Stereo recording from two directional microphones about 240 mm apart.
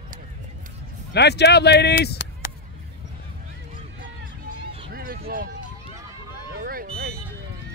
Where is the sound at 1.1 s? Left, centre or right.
Left.